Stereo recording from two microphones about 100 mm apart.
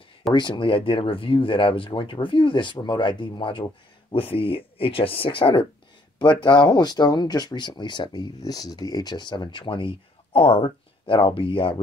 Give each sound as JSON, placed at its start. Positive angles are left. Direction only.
{"t": 0.3, "sound": "speech", "side_deg": 50}